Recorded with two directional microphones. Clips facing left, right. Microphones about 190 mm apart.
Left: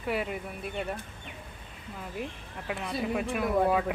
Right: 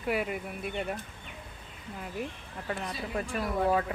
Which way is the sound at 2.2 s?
5° left (ahead or behind).